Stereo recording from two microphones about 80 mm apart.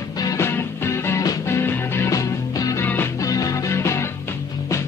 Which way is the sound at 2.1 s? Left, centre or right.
Left.